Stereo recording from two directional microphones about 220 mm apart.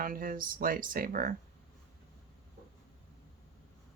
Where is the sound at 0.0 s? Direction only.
40° right (ahead or behind).